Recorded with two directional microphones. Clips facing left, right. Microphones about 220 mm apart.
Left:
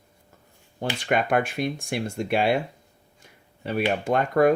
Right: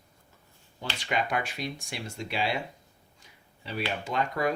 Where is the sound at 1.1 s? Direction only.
55° left (ahead or behind).